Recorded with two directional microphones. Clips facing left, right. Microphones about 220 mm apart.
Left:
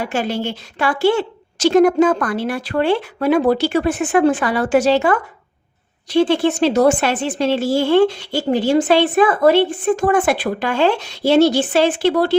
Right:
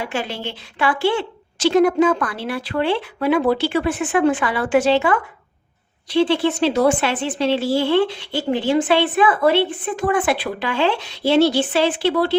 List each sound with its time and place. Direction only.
0.1 s a woman's voice: 45° left (ahead or behind)